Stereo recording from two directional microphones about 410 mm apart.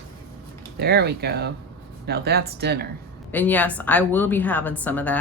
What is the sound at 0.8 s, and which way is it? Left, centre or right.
Speech, right.